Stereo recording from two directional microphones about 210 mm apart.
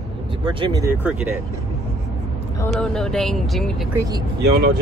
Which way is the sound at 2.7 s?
5° left (ahead or behind).